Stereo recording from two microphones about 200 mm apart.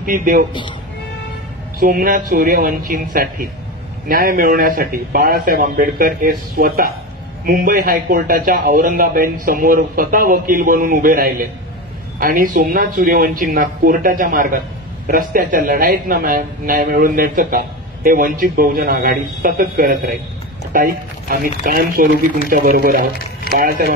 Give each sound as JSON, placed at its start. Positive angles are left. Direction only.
{"t": 0.0, "sound": "a man's voice", "side_deg": -45}
{"t": 1.8, "sound": "a man's voice", "side_deg": -45}